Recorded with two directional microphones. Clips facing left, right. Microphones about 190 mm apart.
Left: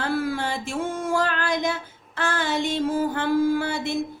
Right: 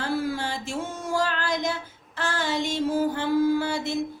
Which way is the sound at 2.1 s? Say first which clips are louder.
Left 2 dB; 55° left (ahead or behind).